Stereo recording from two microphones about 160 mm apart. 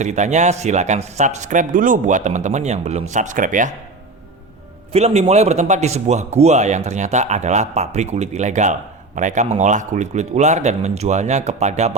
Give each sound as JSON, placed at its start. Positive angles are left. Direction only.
{"t": 0.0, "sound": "a man's voice", "side_deg": -45}
{"t": 4.9, "sound": "a man's voice", "side_deg": -40}